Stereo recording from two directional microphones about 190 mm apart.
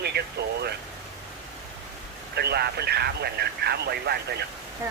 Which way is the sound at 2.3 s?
60° right (ahead or behind).